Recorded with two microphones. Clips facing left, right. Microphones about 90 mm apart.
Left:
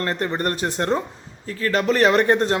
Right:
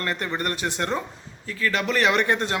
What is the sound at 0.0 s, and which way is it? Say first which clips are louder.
Speech: left 4 dB; 35° left (ahead or behind).